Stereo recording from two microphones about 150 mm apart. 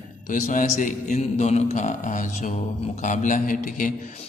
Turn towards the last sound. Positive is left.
turn(degrees=60)  # may be behind; listen again after turning